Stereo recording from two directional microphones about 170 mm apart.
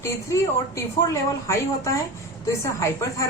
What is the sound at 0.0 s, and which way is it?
Speech, 15° left (ahead or behind).